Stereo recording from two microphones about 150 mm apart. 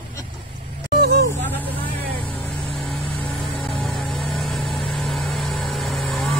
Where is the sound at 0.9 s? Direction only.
90° right.